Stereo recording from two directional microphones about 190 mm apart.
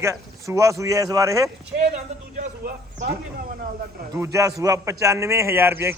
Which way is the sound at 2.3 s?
45° right (ahead or behind).